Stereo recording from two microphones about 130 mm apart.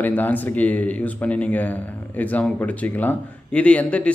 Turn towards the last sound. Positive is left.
turn(degrees=10)  # may be behind; listen again after turning